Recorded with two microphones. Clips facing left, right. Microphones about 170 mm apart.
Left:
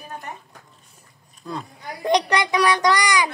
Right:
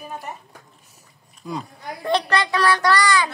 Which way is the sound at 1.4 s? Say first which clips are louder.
Right 1 dB; 10° right (ahead or behind).